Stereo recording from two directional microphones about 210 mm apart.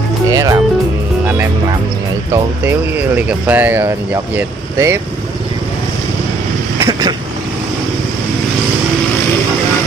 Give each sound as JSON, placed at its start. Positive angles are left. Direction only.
{"t": 0.3, "sound": "music", "side_deg": -15}
{"t": 2.3, "sound": "speech", "side_deg": -10}
{"t": 6.9, "sound": "vehicle", "side_deg": -20}